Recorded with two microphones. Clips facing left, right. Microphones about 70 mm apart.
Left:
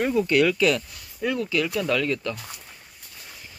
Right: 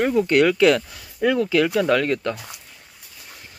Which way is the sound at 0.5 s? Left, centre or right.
Right.